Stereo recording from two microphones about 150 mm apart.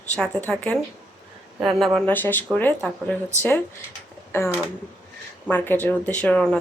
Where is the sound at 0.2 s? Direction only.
5° left (ahead or behind).